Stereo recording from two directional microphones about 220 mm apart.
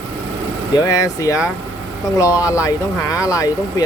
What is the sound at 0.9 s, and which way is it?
Speech, 15° left (ahead or behind).